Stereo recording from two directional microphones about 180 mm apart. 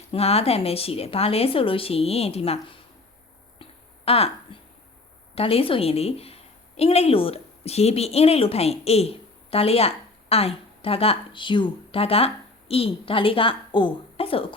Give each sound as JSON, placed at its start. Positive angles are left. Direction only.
{"t": 0.1, "sound": "speech", "side_deg": 35}
{"t": 3.6, "sound": "a sound", "side_deg": 35}
{"t": 5.3, "sound": "a woman's voice", "side_deg": 30}